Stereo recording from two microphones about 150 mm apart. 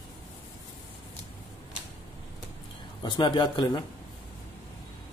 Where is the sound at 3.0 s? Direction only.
30° left (ahead or behind).